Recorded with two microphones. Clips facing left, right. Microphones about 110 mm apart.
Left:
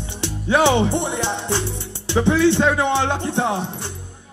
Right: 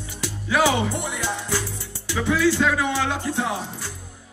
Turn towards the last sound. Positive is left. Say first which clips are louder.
# left 5 dB
turn(degrees=25)  # may be behind; listen again after turning